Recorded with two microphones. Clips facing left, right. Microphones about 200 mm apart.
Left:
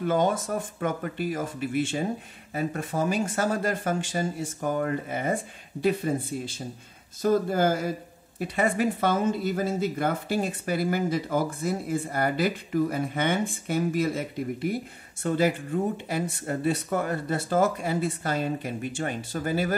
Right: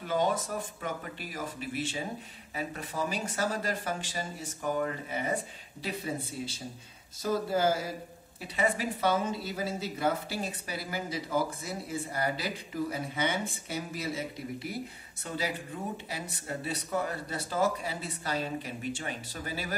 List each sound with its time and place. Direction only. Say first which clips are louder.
0.0 s speech: left 5 dB; 50° left (ahead or behind)